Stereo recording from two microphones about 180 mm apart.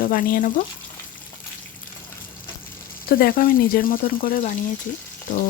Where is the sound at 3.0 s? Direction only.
55° left (ahead or behind).